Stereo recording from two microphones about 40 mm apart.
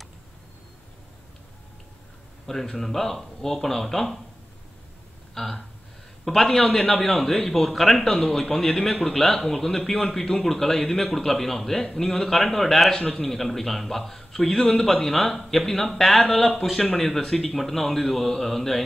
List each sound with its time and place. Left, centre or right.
2.4 s a man's voice: centre
5.3 s a man's voice: centre
13.0 s a man's voice: centre
13.3 s a man's voice: centre